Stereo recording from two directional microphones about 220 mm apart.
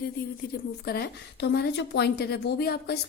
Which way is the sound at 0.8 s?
45° left (ahead or behind).